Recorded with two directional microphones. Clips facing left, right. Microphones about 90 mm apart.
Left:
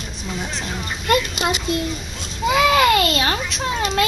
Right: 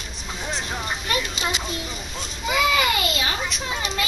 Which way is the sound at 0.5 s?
15° right (ahead or behind).